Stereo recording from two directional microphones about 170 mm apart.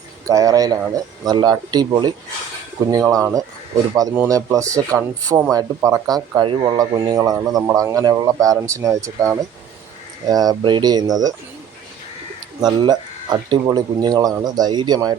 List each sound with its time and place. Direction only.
0.3 s speech: 20° right (ahead or behind)
12.6 s speech: 25° right (ahead or behind)